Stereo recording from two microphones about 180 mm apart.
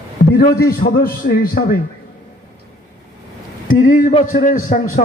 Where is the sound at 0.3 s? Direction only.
55° left (ahead or behind).